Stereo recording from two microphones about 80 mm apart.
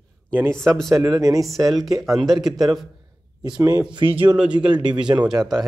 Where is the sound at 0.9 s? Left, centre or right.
Right.